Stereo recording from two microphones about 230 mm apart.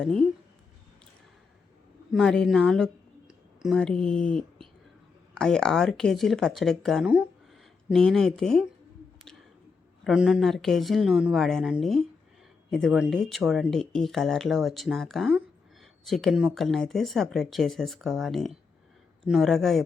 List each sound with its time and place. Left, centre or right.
0.0 s speech: centre
2.1 s speech: centre
10.0 s speech: centre